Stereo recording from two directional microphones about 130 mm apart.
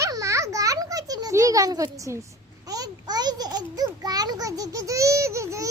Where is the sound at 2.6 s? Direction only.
30° right (ahead or behind).